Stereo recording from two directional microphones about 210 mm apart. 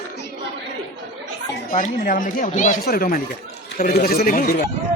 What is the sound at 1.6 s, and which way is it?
Speech, 40° left (ahead or behind).